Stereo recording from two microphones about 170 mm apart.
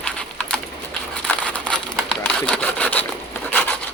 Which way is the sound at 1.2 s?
5° left (ahead or behind).